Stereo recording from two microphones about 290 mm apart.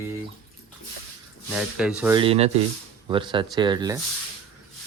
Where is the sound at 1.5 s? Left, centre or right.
Centre.